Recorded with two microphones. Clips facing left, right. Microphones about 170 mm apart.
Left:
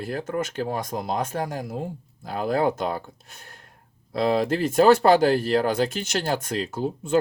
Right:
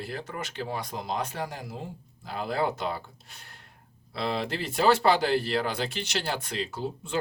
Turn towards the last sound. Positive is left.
turn(degrees=45)  # may be behind; listen again after turning